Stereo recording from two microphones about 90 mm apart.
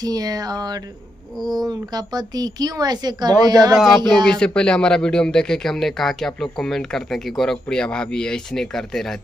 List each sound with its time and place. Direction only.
0.0 s a woman's voice: 45° right (ahead or behind)
3.7 s a sound: centre (ahead or behind)
4.3 s speech: 10° left (ahead or behind)